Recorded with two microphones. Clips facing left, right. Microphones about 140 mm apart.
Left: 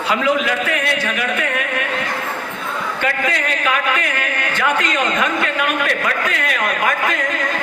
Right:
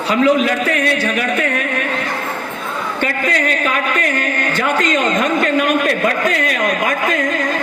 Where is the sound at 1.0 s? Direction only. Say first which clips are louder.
Right 3 dB; 40° right (ahead or behind).